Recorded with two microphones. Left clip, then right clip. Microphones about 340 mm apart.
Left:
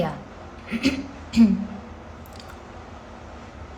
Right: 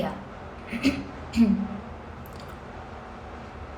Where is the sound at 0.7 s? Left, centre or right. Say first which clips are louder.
Left 2 dB; left.